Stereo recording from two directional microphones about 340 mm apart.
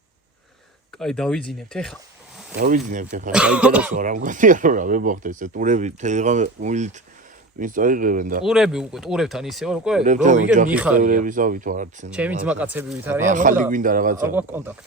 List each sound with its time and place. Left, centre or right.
0.9 s speech: centre
2.6 s speech: right
3.3 s speech: centre
3.9 s speech: right
8.4 s speech: centre
10.0 s speech: right
12.1 s speech: centre
13.2 s speech: right
14.3 s speech: centre